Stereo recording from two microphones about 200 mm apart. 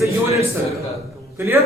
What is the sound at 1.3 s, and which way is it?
Speech, 15° right (ahead or behind).